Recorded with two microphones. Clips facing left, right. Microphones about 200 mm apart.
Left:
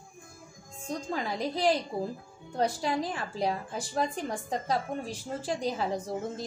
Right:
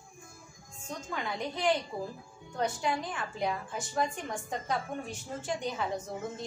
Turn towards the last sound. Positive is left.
turn(degrees=35)  # may be behind; listen again after turning